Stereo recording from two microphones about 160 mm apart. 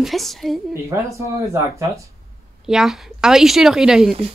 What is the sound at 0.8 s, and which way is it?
Speech, 20° right (ahead or behind).